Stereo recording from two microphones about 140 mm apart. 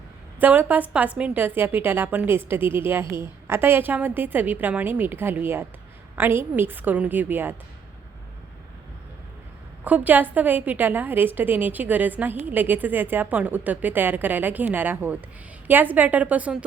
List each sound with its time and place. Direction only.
0.3 s a woman's voice: 15° right (ahead or behind)
9.8 s a woman's voice: 10° right (ahead or behind)